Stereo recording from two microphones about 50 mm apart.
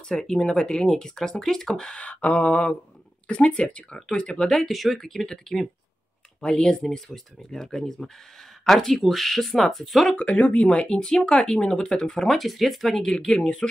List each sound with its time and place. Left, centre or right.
0.1 s speech: centre
1.9 s speech: left
4.5 s speech: centre
10.1 s speech: left
10.8 s speech: centre
12.3 s speech: centre
13.0 s speech: centre